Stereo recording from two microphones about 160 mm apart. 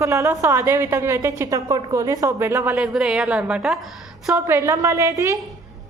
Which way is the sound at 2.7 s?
5° right (ahead or behind).